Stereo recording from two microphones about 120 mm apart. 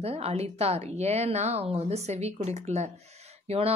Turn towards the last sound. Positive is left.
turn(degrees=-55)  # may be behind; listen again after turning